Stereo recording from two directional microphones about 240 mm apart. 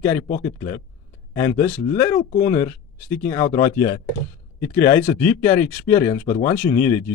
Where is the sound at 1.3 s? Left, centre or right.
Centre.